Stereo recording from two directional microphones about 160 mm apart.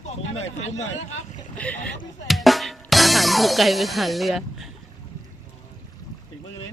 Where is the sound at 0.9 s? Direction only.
45° left (ahead or behind).